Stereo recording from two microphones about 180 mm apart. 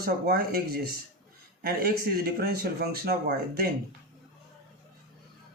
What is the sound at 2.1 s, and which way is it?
Speech, 60° right (ahead or behind).